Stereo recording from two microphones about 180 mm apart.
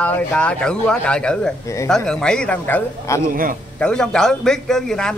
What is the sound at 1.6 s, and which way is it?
Speech, 15° left (ahead or behind).